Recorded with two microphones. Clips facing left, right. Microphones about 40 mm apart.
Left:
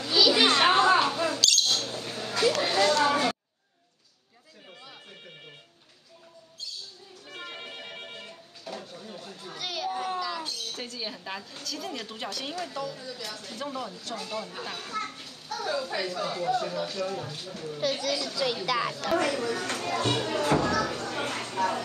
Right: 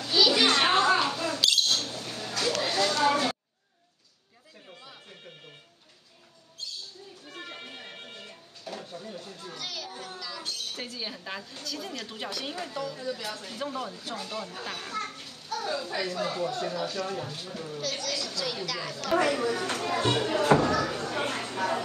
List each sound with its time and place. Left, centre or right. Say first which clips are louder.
0.0 s children playing: left 1 dB; centre
0.4 s mouse: left 2 dB; centre
1.9 s a sound: left 2 dB; centre
7.2 s music: left 2 dB; centre
8.9 s a sound: right 2 dB; centre
9.2 s chatter: left 1 dB; centre
9.8 s a sound: left 10 dB; left
10.2 s cat: left 5 dB; centre
10.7 s a sound: even; centre
11.9 s a child's voice: left 1 dB; centre
17.7 s a child's voice: left 5 dB; centre
19.2 s speech: right 2 dB; centre
19.9 s speech: right 1 dB; centre